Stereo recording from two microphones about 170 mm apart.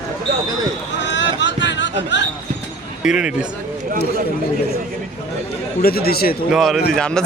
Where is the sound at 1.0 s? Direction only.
90° left.